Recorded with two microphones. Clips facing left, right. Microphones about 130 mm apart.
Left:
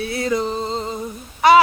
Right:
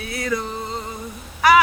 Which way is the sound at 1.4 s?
25° left (ahead or behind).